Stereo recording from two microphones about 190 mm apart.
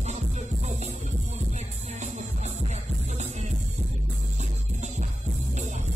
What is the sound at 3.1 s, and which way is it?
Music, 35° right (ahead or behind).